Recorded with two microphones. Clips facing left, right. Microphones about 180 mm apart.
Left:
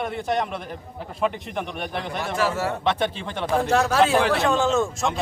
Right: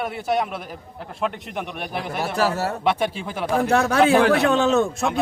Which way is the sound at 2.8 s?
10° right (ahead or behind).